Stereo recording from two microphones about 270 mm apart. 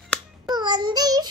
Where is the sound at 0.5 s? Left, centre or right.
Centre.